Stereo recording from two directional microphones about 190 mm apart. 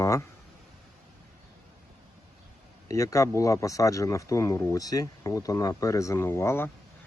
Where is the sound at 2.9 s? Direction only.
15° left (ahead or behind).